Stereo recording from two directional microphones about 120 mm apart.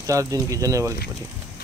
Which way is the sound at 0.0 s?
25° right (ahead or behind).